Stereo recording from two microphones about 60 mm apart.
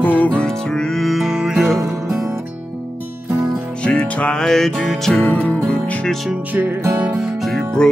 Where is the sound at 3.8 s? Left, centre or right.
Left.